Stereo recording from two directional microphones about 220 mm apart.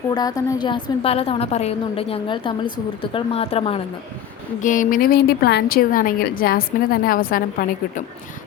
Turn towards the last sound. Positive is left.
turn(degrees=40)  # may be behind; listen again after turning